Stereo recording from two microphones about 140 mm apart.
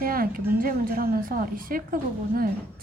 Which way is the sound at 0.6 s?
90° right.